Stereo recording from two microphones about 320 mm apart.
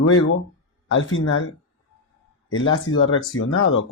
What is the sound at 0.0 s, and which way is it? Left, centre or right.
Speech, left.